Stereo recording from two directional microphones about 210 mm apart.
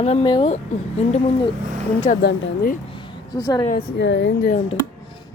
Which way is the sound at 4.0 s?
60° left (ahead or behind).